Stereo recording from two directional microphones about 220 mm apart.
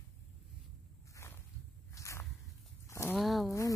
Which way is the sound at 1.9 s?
15° left (ahead or behind).